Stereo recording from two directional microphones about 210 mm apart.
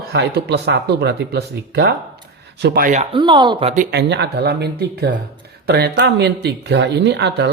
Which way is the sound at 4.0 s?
55° right (ahead or behind).